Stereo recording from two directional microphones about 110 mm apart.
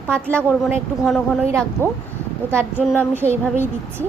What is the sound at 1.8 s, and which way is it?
Speech, 20° left (ahead or behind).